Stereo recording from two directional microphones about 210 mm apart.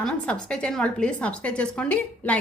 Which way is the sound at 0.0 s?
5° left (ahead or behind).